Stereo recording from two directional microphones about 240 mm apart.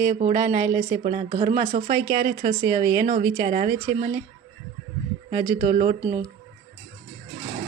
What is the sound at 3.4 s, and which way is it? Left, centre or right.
Speech, right.